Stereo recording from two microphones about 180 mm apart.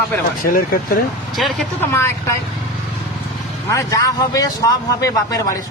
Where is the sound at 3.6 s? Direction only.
20° left (ahead or behind).